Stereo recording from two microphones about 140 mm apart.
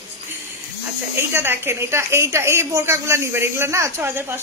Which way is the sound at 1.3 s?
15° right (ahead or behind).